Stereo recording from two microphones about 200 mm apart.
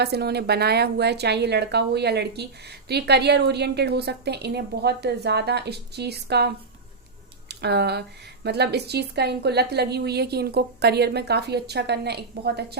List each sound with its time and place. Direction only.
0.0 s a woman's voice: 55° right (ahead or behind)